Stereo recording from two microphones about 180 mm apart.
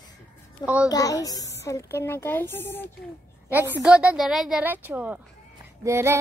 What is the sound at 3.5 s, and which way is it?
A child's voice, 10° right (ahead or behind).